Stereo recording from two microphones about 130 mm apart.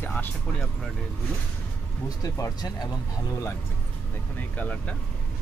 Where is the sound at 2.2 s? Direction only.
30° left (ahead or behind).